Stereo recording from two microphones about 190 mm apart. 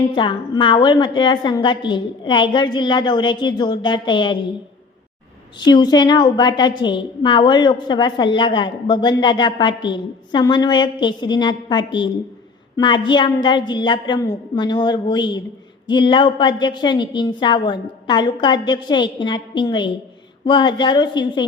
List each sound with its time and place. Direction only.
0.2 s a woman's voice: 25° left (ahead or behind)
5.5 s a woman's voice: 20° left (ahead or behind)